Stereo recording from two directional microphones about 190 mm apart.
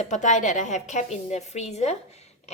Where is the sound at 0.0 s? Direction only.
40° left (ahead or behind).